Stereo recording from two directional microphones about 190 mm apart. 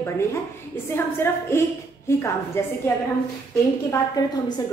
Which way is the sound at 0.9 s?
10° left (ahead or behind).